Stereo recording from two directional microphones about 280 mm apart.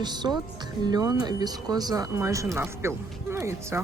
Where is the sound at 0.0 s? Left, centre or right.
Centre.